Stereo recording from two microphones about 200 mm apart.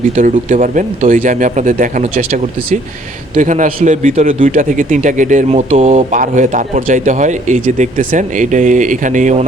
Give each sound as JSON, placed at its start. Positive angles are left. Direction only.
{"t": 0.2, "sound": "a man's voice", "side_deg": -40}